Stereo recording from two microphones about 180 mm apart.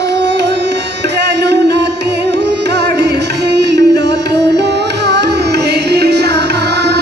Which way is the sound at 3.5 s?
70° right (ahead or behind).